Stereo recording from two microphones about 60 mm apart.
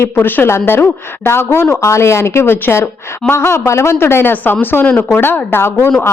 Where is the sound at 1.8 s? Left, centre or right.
Left.